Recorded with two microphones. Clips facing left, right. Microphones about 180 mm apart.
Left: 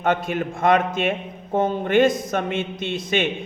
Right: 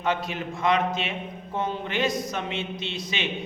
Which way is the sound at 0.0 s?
50° left (ahead or behind).